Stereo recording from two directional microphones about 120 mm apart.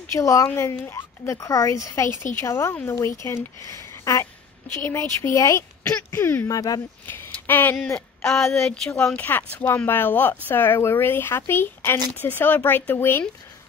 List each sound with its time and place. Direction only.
0.2 s speech: 25° left (ahead or behind)
7.1 s a sound: 15° left (ahead or behind)
8.3 s speech: 5° left (ahead or behind); by 13.2 s 20° left (ahead or behind)